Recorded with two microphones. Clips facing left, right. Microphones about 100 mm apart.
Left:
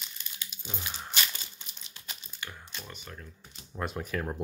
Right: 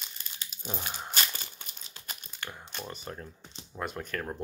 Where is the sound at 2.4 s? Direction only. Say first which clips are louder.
Right 2 dB; 20° right (ahead or behind).